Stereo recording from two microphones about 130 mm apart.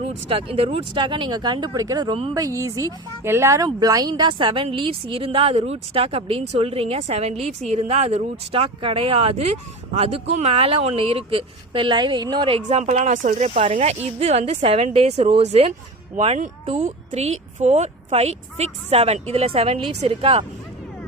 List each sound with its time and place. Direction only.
0.0 s speech: 45° right (ahead or behind)
12.8 s speech: 70° right (ahead or behind)
13.5 s speech: 50° right (ahead or behind)